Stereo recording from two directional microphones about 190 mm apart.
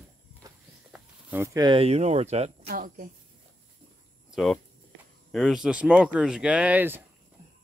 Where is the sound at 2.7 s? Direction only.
45° right (ahead or behind).